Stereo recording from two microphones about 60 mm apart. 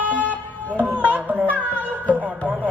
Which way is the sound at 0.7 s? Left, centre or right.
Right.